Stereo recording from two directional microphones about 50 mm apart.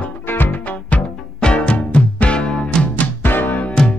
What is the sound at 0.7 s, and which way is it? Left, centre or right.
Music, left.